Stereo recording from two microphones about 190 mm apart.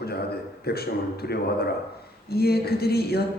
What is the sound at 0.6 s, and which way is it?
A woman's voice, 55° left (ahead or behind).